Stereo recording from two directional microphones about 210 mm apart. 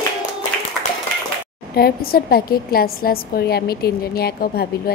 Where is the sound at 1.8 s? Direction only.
45° left (ahead or behind).